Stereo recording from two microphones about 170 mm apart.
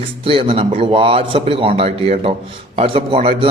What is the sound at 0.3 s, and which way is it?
A man's voice, 35° right (ahead or behind).